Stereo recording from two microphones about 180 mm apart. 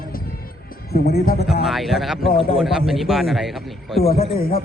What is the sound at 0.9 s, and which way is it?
Speech, 60° left (ahead or behind).